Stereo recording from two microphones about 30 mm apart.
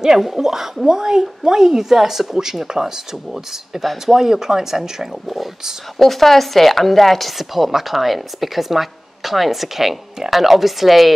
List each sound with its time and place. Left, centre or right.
0.2 s a woman's voice: centre
4.0 s speech: centre
5.9 s speech: centre